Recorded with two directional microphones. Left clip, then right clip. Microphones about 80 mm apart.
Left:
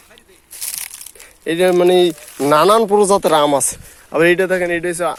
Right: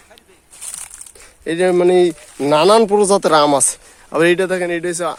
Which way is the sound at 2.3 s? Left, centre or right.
Right.